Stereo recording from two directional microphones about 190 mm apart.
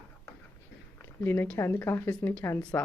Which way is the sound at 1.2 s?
10° left (ahead or behind).